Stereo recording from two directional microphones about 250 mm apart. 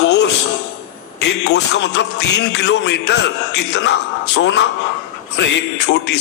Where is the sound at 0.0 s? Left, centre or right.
Left.